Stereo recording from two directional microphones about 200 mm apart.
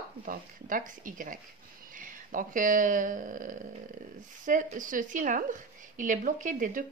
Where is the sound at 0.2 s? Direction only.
40° right (ahead or behind).